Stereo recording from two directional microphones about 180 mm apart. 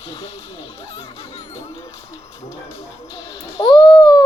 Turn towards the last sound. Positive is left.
turn(degrees=0)  # may be behind; listen again after turning